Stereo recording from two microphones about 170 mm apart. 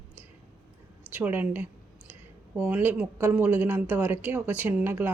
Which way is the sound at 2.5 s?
5° right (ahead or behind).